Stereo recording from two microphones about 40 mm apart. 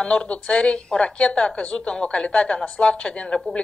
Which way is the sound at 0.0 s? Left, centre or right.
Left.